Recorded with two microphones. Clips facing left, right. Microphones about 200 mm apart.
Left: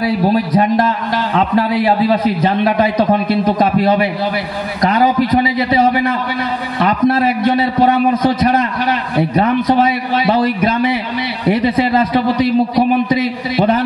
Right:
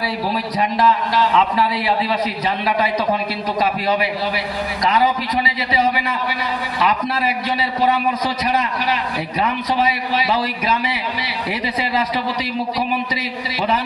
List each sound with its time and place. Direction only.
0.0 s a man's voice: 55° left (ahead or behind)